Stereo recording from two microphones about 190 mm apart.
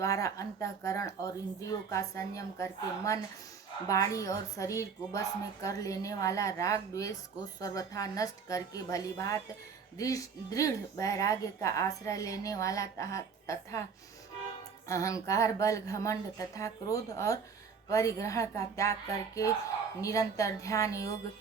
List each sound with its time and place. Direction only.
0.0 s a woman's voice: 15° left (ahead or behind)
14.8 s a woman's voice: 15° left (ahead or behind)
20.0 s a woman's voice: 15° left (ahead or behind)